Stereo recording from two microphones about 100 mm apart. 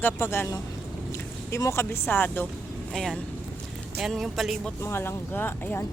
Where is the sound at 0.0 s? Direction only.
25° left (ahead or behind).